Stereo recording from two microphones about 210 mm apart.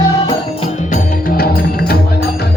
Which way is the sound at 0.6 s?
40° left (ahead or behind).